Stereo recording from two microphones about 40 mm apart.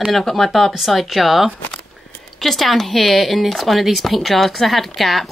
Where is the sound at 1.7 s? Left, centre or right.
Left.